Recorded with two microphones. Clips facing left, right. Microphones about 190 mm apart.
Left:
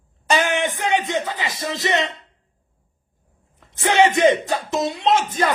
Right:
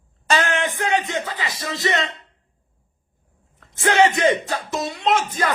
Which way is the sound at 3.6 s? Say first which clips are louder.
Even; 20° left (ahead or behind).